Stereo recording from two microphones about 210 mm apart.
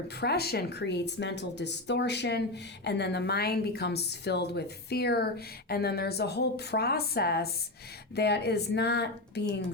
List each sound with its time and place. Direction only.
0.2 s a woman's voice: 50° left (ahead or behind)